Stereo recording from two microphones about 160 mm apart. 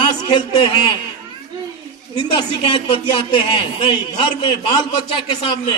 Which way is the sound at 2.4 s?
30° left (ahead or behind).